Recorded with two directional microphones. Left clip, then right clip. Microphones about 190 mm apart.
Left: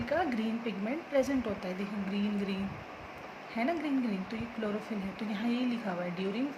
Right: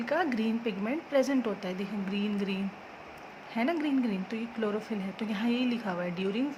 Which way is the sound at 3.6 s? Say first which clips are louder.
Right 3 dB; 30° right (ahead or behind).